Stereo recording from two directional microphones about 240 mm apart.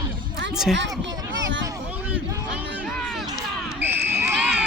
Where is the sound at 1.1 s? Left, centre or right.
Right.